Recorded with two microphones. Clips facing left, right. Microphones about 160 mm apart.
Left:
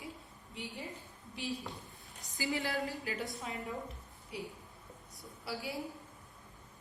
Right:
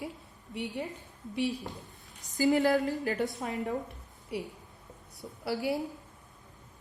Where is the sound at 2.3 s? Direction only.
45° right (ahead or behind).